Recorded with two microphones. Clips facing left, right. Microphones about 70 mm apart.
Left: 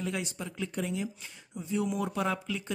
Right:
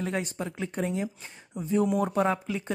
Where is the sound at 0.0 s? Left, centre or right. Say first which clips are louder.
Right 4 dB; right.